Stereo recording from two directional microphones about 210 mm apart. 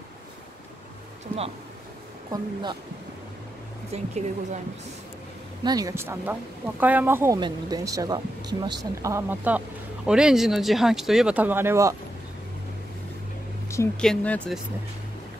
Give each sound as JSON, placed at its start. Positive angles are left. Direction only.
{"t": 2.3, "sound": "speech", "side_deg": -20}
{"t": 3.9, "sound": "speech", "side_deg": -30}
{"t": 5.6, "sound": "speech", "side_deg": -20}
{"t": 13.7, "sound": "speech", "side_deg": 15}